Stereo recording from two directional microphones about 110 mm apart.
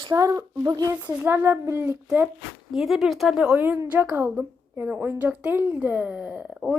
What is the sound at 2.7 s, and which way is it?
A woman's voice, centre (ahead or behind).